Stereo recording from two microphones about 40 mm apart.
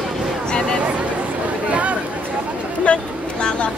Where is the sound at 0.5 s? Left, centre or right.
Centre.